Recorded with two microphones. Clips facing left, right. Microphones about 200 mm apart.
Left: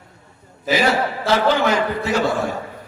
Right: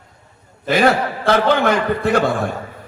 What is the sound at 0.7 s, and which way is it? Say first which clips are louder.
A man's voice: right 3 dB; 55° right (ahead or behind).